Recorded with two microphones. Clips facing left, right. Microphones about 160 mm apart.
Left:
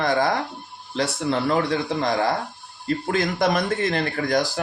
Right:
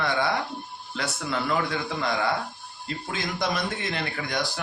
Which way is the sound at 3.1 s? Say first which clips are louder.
Left 7 dB; 55° left (ahead or behind).